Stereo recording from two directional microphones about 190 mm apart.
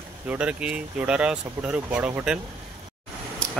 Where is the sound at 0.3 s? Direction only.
5° right (ahead or behind).